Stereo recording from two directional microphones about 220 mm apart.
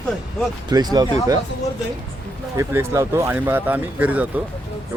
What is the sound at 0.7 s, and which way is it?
Speech, 20° right (ahead or behind).